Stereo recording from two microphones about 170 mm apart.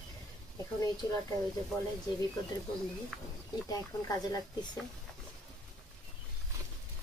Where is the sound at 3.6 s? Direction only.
20° left (ahead or behind).